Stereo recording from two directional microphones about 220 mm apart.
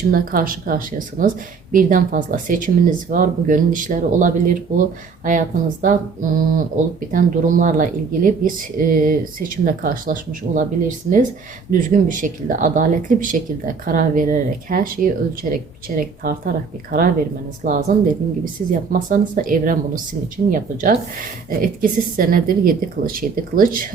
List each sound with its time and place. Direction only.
0.1 s speech: 40° right (ahead or behind)
17.6 s speech: 40° right (ahead or behind)